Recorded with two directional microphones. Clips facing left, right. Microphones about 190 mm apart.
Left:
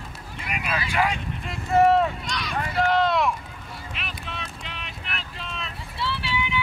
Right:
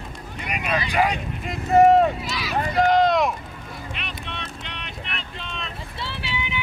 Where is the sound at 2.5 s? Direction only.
15° right (ahead or behind).